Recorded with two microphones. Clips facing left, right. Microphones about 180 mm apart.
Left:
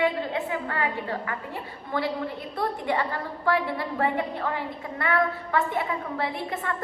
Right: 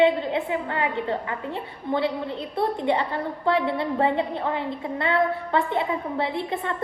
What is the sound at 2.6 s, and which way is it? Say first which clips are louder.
A woman's voice: right 4 dB; 20° right (ahead or behind).